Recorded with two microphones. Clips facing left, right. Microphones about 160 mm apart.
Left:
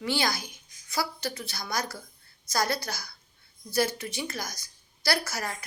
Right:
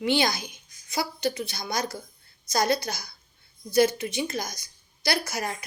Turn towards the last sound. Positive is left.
turn(degrees=-20)  # may be behind; listen again after turning